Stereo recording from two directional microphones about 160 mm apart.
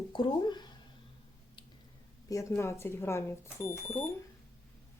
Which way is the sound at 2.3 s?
20° left (ahead or behind).